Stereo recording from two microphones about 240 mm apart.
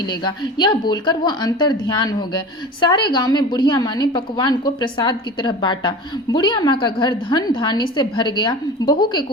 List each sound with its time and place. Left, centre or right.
0.1 s a woman's voice: centre